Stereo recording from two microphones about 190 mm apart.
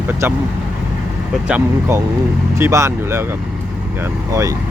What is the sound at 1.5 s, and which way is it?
Speech, 10° right (ahead or behind).